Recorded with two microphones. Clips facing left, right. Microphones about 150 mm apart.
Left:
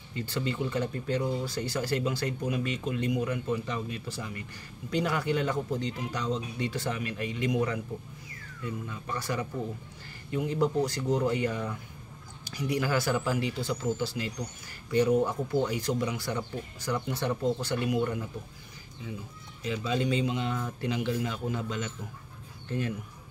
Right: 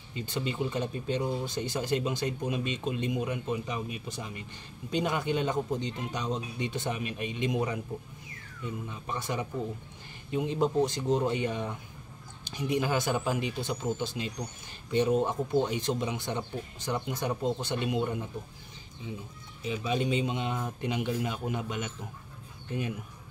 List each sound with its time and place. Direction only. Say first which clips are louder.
0.1 s speech: left 1 dB; 20° right (ahead or behind)
19.7 s speech: even; 20° right (ahead or behind)